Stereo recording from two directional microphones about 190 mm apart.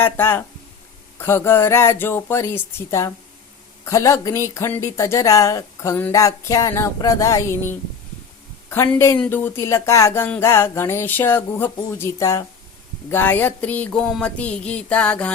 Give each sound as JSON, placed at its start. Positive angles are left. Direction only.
{"t": 0.0, "sound": "speech", "side_deg": 10}